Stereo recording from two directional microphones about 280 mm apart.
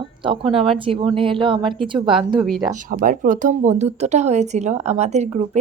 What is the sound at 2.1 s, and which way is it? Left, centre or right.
Speech, centre.